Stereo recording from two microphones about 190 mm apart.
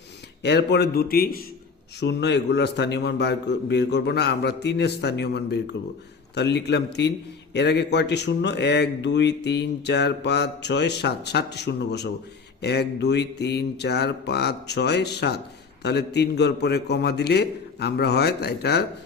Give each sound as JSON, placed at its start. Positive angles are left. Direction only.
{"t": 0.4, "sound": "speech", "side_deg": 60}
{"t": 2.0, "sound": "speech", "side_deg": 65}